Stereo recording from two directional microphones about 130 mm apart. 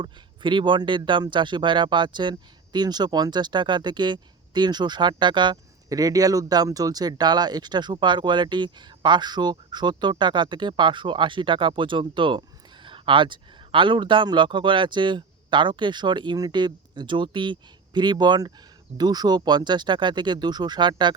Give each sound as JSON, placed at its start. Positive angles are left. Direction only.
{"t": 0.0, "sound": "speech", "side_deg": -40}